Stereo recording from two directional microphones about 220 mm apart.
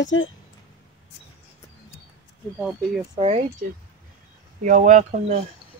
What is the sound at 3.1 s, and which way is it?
Speech, 30° right (ahead or behind).